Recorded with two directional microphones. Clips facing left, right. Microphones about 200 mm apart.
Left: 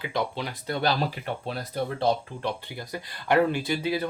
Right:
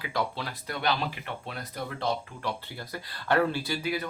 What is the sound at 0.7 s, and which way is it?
Speech, 35° left (ahead or behind).